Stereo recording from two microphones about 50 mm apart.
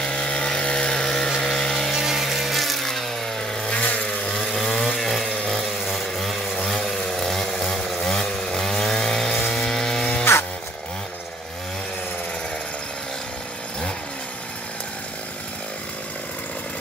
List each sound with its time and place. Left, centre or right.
0.0 s chainsaw: centre
1.9 s a sound: centre
3.7 s vehicle: left
4.3 s chainsaw: centre
5.6 s chainsaw: centre
9.5 s a sound: centre